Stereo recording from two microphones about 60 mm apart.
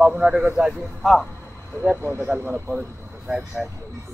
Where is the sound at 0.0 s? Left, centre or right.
Centre.